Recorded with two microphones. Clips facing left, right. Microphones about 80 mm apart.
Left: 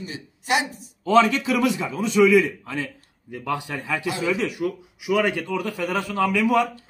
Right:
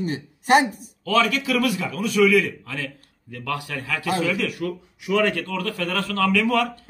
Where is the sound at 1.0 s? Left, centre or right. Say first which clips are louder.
Left 3 dB; left.